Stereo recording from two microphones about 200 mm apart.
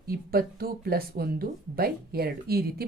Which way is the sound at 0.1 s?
50° right (ahead or behind).